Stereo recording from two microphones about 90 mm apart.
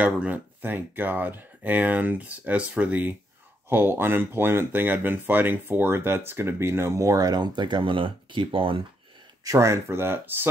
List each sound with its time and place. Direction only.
0.0 s speech: 15° right (ahead or behind); by 8.8 s 75° right (ahead or behind)
9.4 s speech: 35° right (ahead or behind)